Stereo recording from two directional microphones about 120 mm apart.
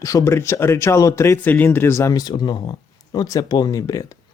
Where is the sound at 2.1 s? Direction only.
35° left (ahead or behind).